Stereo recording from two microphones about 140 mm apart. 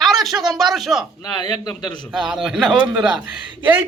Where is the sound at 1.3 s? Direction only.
30° left (ahead or behind).